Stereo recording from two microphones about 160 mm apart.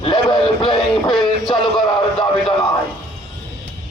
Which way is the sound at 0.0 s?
30° left (ahead or behind).